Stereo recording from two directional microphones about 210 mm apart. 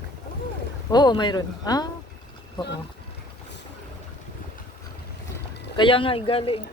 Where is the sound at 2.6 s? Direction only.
20° left (ahead or behind).